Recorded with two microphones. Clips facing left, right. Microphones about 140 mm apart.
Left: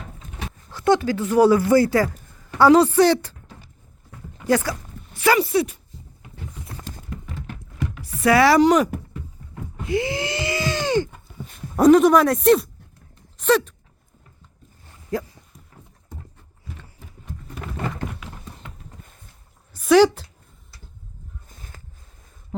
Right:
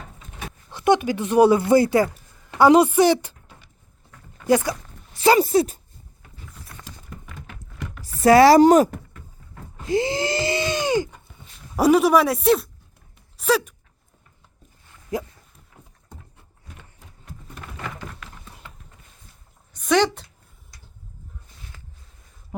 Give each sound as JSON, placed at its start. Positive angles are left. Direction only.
{"t": 0.7, "sound": "a woman's voice", "side_deg": -20}
{"t": 4.4, "sound": "a woman's voice", "side_deg": -15}
{"t": 5.1, "sound": "speech", "side_deg": -30}
{"t": 5.4, "sound": "speech", "side_deg": -40}
{"t": 8.2, "sound": "speech", "side_deg": -35}
{"t": 9.8, "sound": "a sound", "side_deg": -35}
{"t": 11.8, "sound": "speech", "side_deg": -5}
{"t": 13.3, "sound": "a sound", "side_deg": -5}
{"t": 15.1, "sound": "a woman's voice", "side_deg": -15}
{"t": 19.7, "sound": "a woman's voice", "side_deg": 5}